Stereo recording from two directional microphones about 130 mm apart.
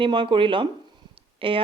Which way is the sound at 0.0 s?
40° right (ahead or behind).